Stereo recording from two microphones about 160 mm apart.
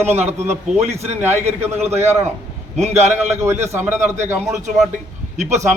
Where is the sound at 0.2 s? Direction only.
45° right (ahead or behind).